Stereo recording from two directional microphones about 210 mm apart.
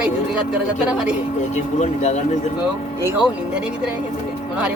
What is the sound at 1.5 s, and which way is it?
Speech, 35° left (ahead or behind).